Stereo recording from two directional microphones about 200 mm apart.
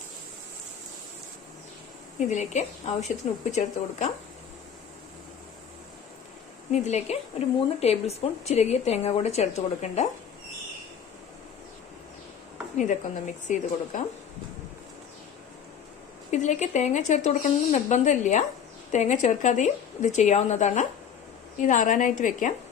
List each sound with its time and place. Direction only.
2.1 s speech: 35° left (ahead or behind)
6.7 s speech: 35° left (ahead or behind)
12.7 s speech: 40° left (ahead or behind)
16.3 s speech: 35° left (ahead or behind)